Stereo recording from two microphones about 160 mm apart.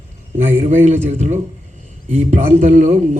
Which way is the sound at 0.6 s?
45° right (ahead or behind).